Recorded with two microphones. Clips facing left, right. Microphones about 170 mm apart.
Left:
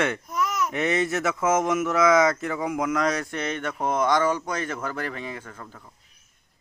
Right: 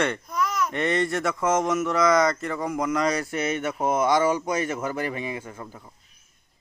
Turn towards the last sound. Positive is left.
turn(degrees=-10)  # may be behind; listen again after turning